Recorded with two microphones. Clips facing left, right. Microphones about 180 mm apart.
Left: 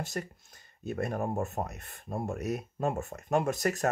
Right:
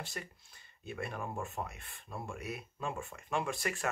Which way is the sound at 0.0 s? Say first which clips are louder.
Left 8 dB; 45° left (ahead or behind).